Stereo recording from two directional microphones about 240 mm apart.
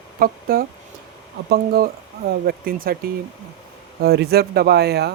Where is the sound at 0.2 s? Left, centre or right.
Right.